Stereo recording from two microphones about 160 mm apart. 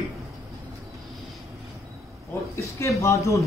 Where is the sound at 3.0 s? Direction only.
20° left (ahead or behind).